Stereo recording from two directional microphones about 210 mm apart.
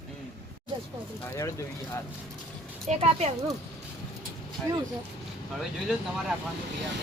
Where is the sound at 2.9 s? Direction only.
30° right (ahead or behind).